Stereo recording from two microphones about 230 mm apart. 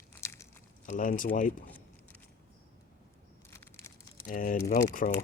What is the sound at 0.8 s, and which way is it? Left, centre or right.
Speech, left.